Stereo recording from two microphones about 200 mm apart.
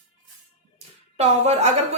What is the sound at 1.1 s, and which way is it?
Speech, 30° right (ahead or behind).